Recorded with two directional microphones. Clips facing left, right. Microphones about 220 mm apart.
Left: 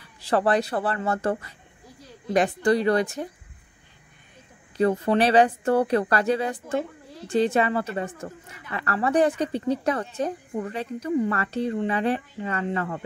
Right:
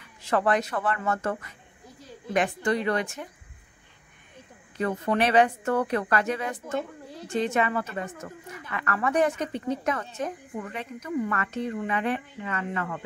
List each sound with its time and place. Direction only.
0.0 s a woman's voice: 35° left (ahead or behind)
4.7 s a woman's voice: 35° left (ahead or behind)